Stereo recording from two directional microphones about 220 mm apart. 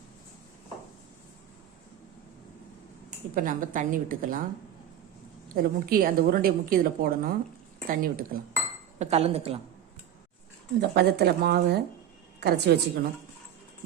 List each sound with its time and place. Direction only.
3.3 s a woman's voice: 40° right (ahead or behind)
5.5 s a woman's voice: 40° right (ahead or behind)
9.0 s speech: 30° right (ahead or behind)
10.8 s speech: 45° right (ahead or behind)